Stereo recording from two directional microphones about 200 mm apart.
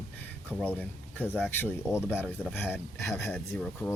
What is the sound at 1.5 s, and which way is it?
Speech, 10° left (ahead or behind).